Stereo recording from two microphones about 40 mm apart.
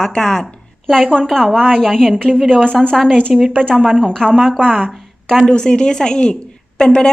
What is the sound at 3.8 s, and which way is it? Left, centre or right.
A woman's voice, centre.